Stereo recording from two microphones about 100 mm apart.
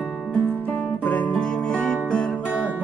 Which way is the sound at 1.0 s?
10° left (ahead or behind).